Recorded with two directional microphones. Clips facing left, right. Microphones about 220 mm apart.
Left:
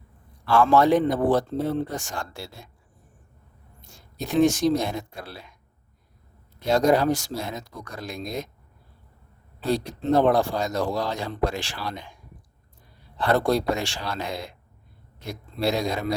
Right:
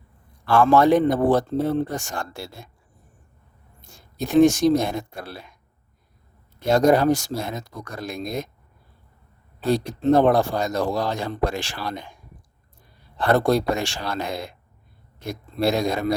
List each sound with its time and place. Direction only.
0.4 s speech: 50° right (ahead or behind)
4.3 s speech: 45° right (ahead or behind)
6.7 s speech: 50° right (ahead or behind)
9.6 s speech: 50° right (ahead or behind)
13.1 s speech: 50° right (ahead or behind)